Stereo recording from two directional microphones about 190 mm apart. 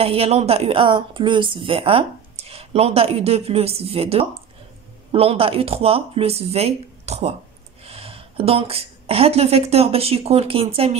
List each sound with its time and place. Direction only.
0.0 s a woman's voice: 30° right (ahead or behind)